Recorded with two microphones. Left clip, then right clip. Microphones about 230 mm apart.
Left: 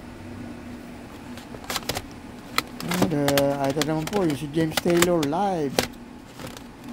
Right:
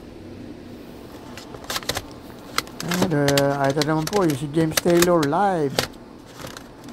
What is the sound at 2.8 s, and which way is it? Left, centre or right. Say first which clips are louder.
Speech: right 4 dB; centre.